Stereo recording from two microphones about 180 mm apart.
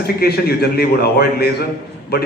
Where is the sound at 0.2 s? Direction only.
60° left (ahead or behind).